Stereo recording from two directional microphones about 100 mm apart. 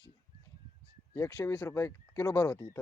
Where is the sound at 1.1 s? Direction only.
30° left (ahead or behind).